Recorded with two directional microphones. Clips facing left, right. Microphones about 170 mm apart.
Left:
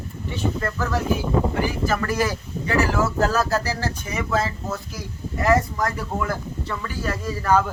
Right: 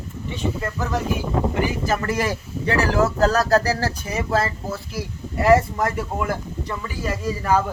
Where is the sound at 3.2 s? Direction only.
40° right (ahead or behind); by 7.6 s 10° right (ahead or behind).